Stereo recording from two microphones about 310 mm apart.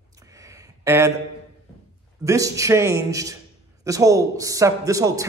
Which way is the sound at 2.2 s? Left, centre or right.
Centre.